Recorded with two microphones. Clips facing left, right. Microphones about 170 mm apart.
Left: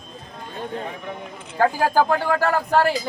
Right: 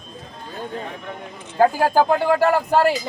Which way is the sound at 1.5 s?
20° right (ahead or behind).